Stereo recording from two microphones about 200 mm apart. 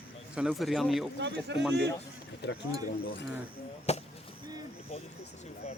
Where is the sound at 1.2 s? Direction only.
60° right (ahead or behind).